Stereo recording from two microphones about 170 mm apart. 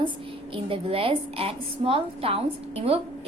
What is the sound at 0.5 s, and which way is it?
A woman's voice, 35° right (ahead or behind).